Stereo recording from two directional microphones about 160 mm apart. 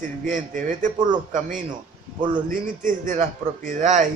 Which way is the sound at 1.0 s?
25° right (ahead or behind).